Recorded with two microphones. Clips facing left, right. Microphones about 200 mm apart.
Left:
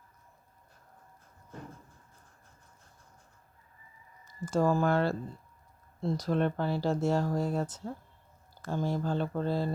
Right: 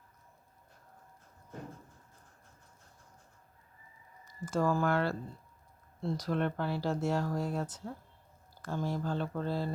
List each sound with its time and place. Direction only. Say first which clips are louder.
4.4 s speech: left 3 dB; 25° left (ahead or behind)